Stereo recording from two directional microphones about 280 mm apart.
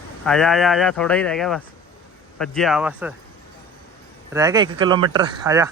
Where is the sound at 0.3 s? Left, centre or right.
Centre.